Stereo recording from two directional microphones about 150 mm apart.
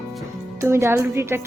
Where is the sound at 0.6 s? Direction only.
15° right (ahead or behind).